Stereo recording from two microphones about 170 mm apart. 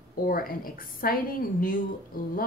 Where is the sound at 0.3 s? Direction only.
60° left (ahead or behind).